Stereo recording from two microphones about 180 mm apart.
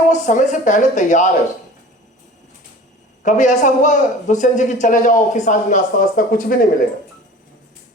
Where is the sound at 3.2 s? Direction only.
45° left (ahead or behind).